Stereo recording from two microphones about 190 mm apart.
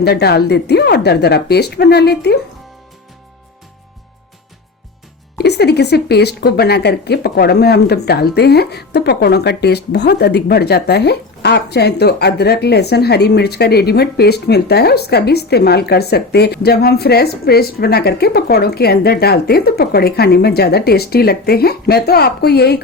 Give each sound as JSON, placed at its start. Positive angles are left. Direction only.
{"t": 0.0, "sound": "speech", "side_deg": 55}
{"t": 5.4, "sound": "speech", "side_deg": 60}